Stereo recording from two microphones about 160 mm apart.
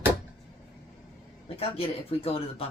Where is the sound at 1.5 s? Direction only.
35° left (ahead or behind).